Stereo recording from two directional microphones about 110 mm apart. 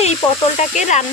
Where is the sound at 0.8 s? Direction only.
90° left.